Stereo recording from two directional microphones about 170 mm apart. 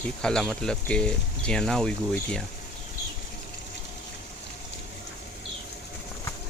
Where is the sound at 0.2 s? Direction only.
5° left (ahead or behind).